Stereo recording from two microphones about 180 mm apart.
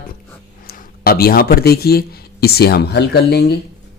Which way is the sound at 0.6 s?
55° left (ahead or behind).